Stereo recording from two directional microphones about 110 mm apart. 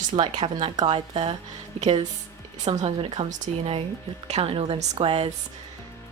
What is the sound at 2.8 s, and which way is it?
Speech, 50° right (ahead or behind).